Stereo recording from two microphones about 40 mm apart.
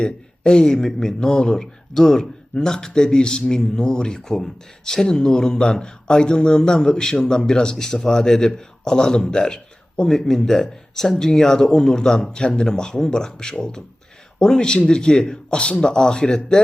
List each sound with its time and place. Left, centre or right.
0.0 s a man's voice: centre